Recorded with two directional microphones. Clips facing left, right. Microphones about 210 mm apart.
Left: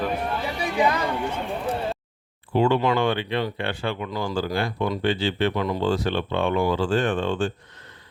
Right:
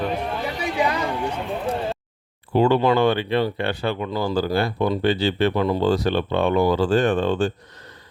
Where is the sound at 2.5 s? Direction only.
40° right (ahead or behind).